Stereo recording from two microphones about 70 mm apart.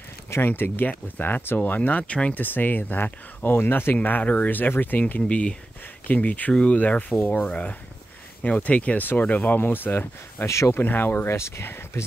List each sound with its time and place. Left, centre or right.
0.3 s speech: left
10.4 s speech: left
10.8 s speech: left